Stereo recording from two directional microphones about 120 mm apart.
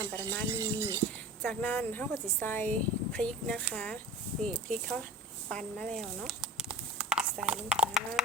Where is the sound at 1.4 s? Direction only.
15° left (ahead or behind); by 6.7 s centre (ahead or behind).